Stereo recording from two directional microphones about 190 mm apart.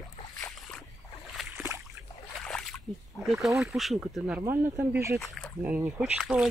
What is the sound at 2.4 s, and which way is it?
Splash, centre (ahead or behind).